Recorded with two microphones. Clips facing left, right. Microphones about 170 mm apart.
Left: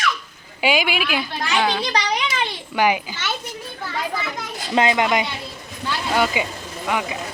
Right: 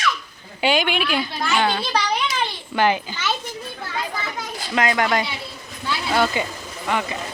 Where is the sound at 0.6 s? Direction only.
10° left (ahead or behind).